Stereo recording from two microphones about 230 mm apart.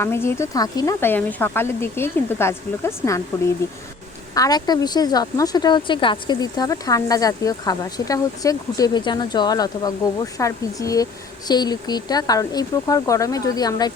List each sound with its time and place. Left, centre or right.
0.0 s a woman's voice: centre